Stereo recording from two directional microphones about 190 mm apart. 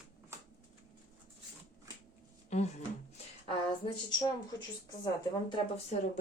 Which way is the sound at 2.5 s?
35° left (ahead or behind).